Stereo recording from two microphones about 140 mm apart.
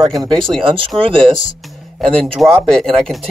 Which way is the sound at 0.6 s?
35° right (ahead or behind).